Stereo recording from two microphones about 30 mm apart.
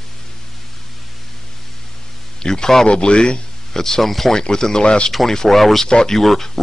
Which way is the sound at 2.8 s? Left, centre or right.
Left.